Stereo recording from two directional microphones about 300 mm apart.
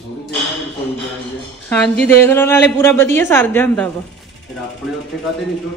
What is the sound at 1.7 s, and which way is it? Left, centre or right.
A woman's voice, centre.